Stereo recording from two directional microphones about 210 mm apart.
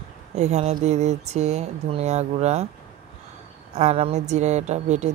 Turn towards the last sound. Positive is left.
turn(degrees=-35)  # may be behind; listen again after turning